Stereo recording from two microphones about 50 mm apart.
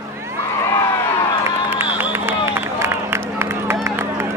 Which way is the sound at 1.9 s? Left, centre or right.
Right.